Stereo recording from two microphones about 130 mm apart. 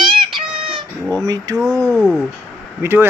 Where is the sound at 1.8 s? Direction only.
5° left (ahead or behind).